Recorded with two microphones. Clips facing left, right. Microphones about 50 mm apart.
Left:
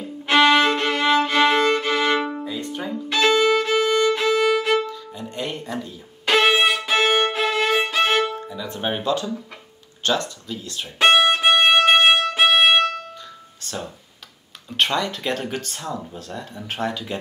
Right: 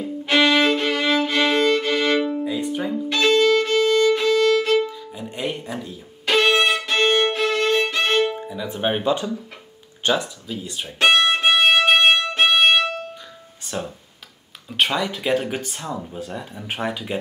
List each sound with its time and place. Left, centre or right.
0.2 s violin: centre
2.4 s music: centre
3.1 s violin: centre
4.8 s music: centre
8.5 s speech: centre
11.1 s violin: centre
13.7 s a sound: centre
14.7 s speech: centre